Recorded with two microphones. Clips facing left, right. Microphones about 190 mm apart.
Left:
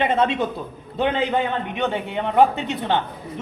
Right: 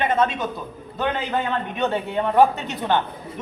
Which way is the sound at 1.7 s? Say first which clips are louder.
Right 1 dB; 15° left (ahead or behind).